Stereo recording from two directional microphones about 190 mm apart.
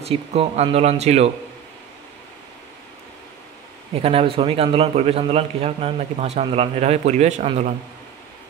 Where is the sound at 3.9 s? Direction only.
30° right (ahead or behind).